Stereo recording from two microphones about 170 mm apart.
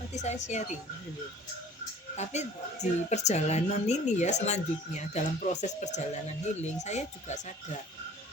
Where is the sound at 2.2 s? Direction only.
40° left (ahead or behind).